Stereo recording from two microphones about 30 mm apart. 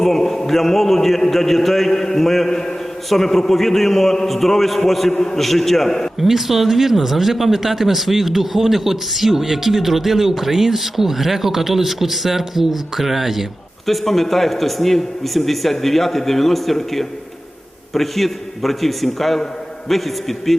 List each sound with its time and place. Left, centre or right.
0.0 s a sound: centre
0.4 s a man's voice: centre
6.1 s speech: centre
13.8 s speech: centre